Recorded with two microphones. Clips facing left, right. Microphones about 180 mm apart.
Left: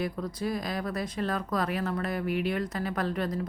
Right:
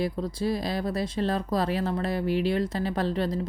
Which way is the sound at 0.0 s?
30° right (ahead or behind).